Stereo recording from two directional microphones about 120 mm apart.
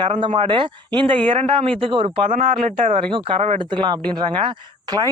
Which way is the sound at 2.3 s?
90° right.